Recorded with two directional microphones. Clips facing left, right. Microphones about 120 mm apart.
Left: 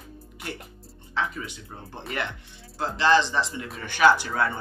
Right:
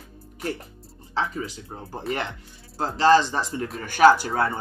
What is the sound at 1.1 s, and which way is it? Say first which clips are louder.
Speech: right 2 dB; 30° right (ahead or behind).